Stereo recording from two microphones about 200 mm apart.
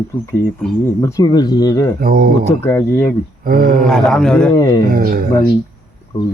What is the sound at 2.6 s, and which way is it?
Speech, 10° left (ahead or behind).